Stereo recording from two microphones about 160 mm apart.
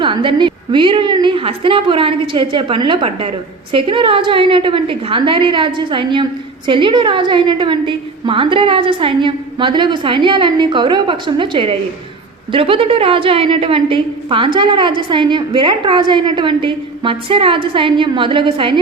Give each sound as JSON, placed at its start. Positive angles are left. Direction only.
{"t": 0.0, "sound": "a woman's voice", "side_deg": -30}